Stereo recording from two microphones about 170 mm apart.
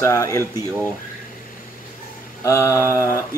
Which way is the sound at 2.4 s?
15° left (ahead or behind).